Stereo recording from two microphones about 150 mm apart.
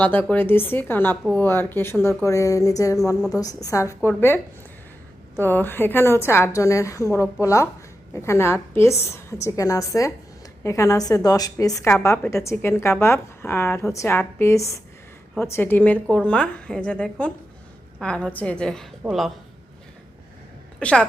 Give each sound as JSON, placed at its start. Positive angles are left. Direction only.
{"t": 0.0, "sound": "a woman's voice", "side_deg": 10}
{"t": 5.4, "sound": "a woman's voice", "side_deg": 15}
{"t": 20.7, "sound": "a woman's voice", "side_deg": 5}